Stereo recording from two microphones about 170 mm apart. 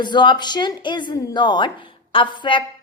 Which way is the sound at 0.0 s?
25° left (ahead or behind).